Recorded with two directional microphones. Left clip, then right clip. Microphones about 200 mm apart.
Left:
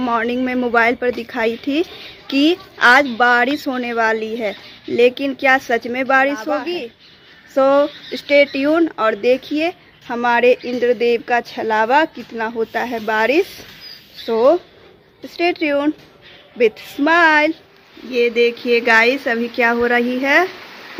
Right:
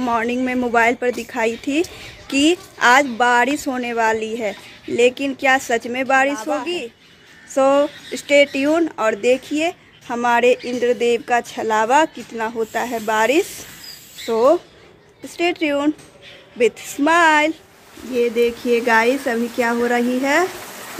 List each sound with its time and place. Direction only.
0.0 s speech: 5° left (ahead or behind)